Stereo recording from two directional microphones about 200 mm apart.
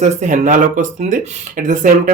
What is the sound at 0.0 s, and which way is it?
Speech, 35° right (ahead or behind).